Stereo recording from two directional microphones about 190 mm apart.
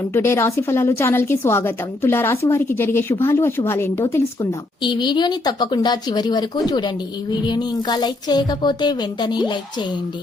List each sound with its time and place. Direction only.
0.1 s a woman's voice: 15° left (ahead or behind)